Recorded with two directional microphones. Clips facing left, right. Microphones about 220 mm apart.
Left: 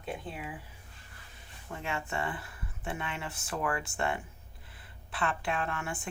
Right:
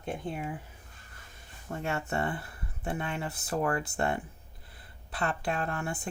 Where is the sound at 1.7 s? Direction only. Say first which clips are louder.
Right 4 dB; 40° right (ahead or behind).